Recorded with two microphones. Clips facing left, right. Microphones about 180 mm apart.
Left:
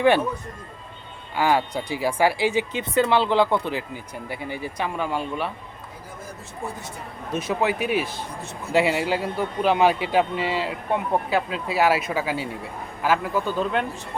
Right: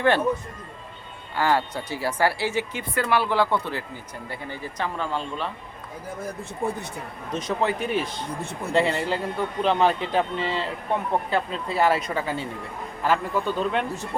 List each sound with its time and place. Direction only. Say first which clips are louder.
1.4 s speech: left 2 dB; 15° left (ahead or behind)
6.6 s speech: right 6 dB; 60° right (ahead or behind)
7.3 s a man's voice: left 2 dB; 5° left (ahead or behind)